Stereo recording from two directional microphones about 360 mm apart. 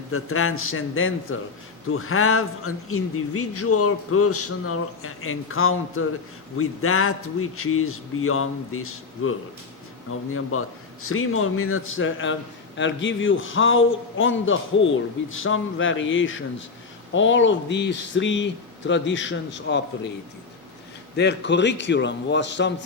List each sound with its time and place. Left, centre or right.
0.1 s a man's voice: left
21.2 s a man's voice: left